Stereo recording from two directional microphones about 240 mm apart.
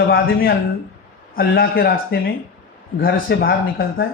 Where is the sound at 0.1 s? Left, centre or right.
Left.